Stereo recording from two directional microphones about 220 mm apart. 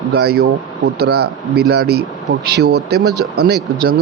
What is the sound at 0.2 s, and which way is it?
Speech, 45° right (ahead or behind).